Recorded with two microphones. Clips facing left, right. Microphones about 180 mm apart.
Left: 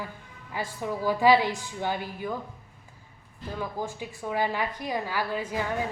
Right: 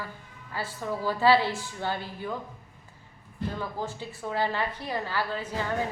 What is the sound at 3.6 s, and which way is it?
A woman's voice, 15° left (ahead or behind).